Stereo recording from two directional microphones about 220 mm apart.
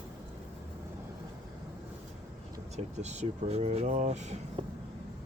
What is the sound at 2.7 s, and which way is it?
Speech, 30° right (ahead or behind).